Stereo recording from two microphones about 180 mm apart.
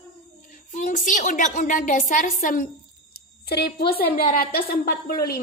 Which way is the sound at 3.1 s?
60° left (ahead or behind).